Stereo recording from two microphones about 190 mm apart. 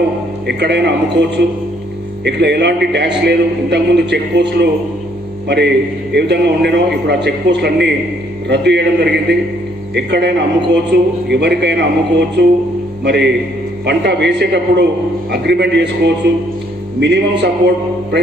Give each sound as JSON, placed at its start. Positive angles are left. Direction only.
{"t": 0.5, "sound": "a man's voice", "side_deg": -60}
{"t": 6.1, "sound": "a man's voice", "side_deg": -60}